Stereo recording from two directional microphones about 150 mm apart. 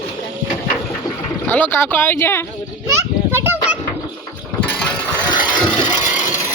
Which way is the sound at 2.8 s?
15° right (ahead or behind).